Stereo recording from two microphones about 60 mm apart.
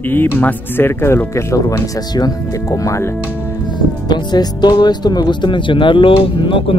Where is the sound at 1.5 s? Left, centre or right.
Left.